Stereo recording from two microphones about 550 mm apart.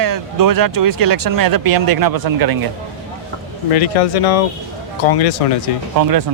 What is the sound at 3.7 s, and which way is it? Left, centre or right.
Speech, left.